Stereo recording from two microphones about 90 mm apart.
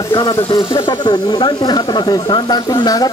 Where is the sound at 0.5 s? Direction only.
60° left (ahead or behind).